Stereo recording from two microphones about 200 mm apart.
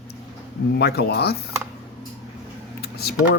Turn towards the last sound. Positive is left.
turn(degrees=55)  # may be behind; listen again after turning